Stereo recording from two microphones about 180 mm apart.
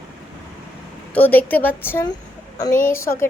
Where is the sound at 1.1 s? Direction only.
10° left (ahead or behind).